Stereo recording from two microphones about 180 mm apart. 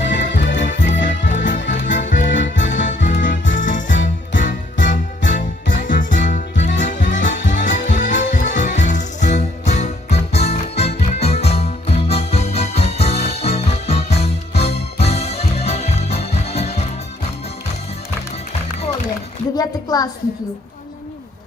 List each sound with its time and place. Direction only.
0.1 s music: 85° left
0.8 s music: 45° left (ahead or behind)
1.4 s music: 90° left
2.0 s music: 45° left (ahead or behind)
2.3 s music: 90° left
3.0 s music: 45° left (ahead or behind)
5.3 s music: 90° left
6.0 s music: 45° left (ahead or behind)
19.5 s a sound: 20° left (ahead or behind)